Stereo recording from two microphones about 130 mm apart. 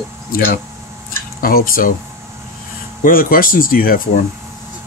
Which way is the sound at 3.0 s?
90° left.